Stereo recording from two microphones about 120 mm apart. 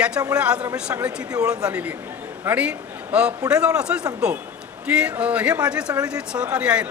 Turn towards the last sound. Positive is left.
turn(degrees=-10)  # may be behind; listen again after turning